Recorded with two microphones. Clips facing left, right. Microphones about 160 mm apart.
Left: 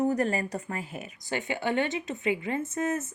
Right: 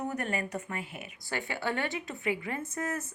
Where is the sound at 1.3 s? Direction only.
20° left (ahead or behind).